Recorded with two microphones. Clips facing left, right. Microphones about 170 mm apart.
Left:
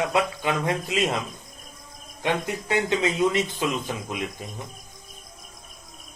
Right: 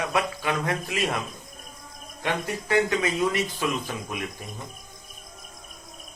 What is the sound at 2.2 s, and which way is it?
Speech, 20° left (ahead or behind).